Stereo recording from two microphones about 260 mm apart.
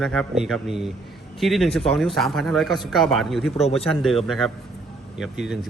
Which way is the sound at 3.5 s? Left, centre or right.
Left.